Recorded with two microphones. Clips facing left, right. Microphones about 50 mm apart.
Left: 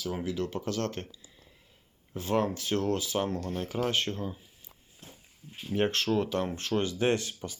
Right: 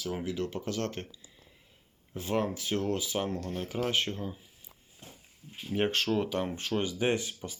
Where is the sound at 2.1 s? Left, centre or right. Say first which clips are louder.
Left 2 dB; centre.